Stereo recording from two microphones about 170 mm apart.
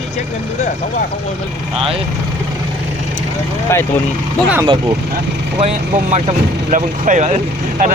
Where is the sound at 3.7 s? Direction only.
15° left (ahead or behind).